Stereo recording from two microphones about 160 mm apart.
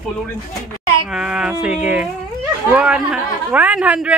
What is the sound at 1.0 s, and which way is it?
Speech, 5° right (ahead or behind).